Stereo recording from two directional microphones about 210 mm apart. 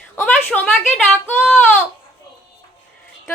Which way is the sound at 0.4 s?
5° left (ahead or behind).